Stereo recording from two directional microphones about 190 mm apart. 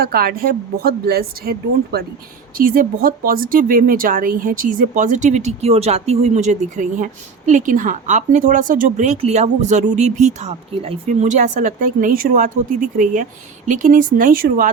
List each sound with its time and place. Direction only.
0.0 s speech: 50° right (ahead or behind)